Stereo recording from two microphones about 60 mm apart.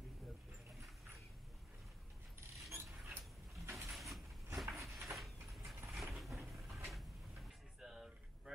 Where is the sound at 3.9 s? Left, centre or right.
Centre.